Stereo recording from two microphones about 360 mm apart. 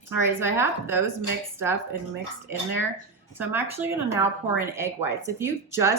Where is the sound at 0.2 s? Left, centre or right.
Centre.